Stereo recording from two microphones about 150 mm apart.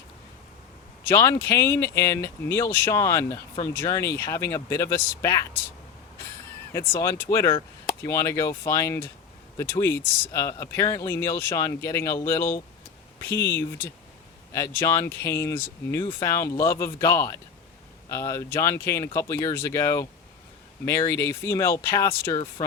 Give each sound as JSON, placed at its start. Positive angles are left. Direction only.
{"t": 1.0, "sound": "speech", "side_deg": 20}
{"t": 6.7, "sound": "speech", "side_deg": 15}